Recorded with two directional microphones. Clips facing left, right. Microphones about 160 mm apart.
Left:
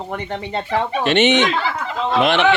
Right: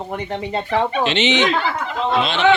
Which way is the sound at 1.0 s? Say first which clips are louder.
Left 4 dB; 55° left (ahead or behind).